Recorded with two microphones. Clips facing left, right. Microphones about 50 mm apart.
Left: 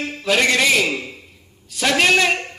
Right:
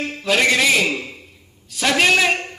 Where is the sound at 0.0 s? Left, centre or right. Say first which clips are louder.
Even; centre.